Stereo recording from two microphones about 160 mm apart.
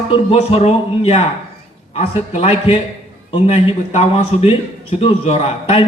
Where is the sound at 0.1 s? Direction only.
40° left (ahead or behind).